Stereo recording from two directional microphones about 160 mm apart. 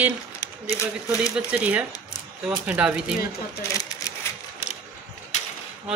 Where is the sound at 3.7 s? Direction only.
20° left (ahead or behind).